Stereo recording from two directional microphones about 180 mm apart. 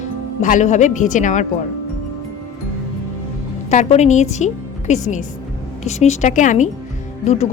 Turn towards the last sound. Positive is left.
turn(degrees=40)  # may be behind; listen again after turning